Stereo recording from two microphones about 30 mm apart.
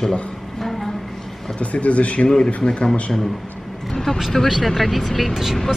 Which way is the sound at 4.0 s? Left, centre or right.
Centre.